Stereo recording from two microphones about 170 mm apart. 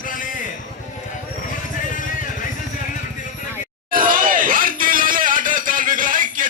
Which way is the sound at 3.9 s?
55° right (ahead or behind).